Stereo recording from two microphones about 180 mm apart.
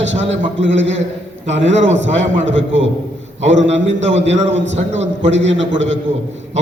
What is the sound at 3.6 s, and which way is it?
Speech, 40° right (ahead or behind).